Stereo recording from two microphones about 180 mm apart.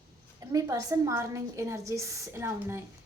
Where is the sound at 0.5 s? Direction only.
20° right (ahead or behind).